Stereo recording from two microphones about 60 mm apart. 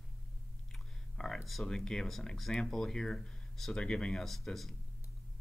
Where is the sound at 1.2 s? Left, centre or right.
Centre.